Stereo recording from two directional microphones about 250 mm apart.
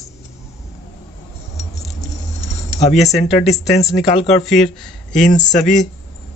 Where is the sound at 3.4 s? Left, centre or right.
Left.